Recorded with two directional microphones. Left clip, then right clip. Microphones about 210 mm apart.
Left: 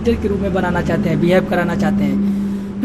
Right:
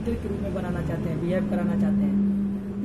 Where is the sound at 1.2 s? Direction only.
40° left (ahead or behind).